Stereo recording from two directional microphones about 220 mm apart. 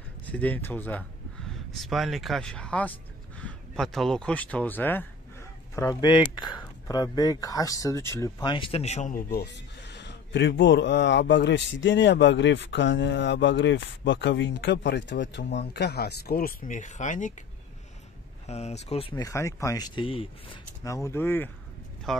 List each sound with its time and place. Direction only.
0.3 s speech: 5° left (ahead or behind); by 17.5 s 35° left (ahead or behind)
18.5 s speech: 30° left (ahead or behind); by 21.5 s 10° left (ahead or behind)